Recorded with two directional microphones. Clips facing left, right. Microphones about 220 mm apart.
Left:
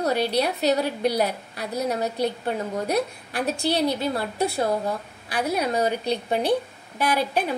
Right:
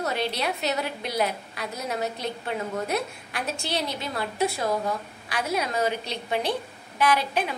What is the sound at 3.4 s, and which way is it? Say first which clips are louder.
A woman's voice: left 7 dB; 35° left (ahead or behind).